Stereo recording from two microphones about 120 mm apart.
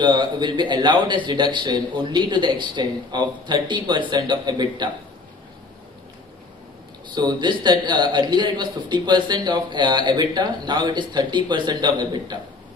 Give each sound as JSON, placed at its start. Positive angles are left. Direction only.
{"t": 0.0, "sound": "a man's voice", "side_deg": -40}
{"t": 7.1, "sound": "a man's voice", "side_deg": -40}